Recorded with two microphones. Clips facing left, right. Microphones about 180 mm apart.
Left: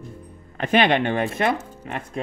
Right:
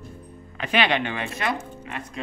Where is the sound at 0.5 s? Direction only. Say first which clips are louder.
Left 4 dB; 50° left (ahead or behind).